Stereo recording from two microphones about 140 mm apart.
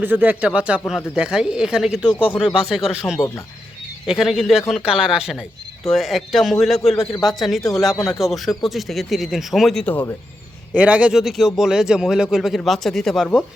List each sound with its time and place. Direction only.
0.0 s a man's voice: 15° right (ahead or behind)
3.2 s speech: 20° left (ahead or behind)
4.0 s a man's voice: centre (ahead or behind)
9.8 s speech: 10° left (ahead or behind)
10.8 s a man's voice: 10° right (ahead or behind)